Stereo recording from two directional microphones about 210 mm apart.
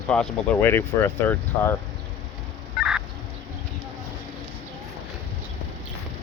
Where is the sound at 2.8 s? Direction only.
Centre (ahead or behind).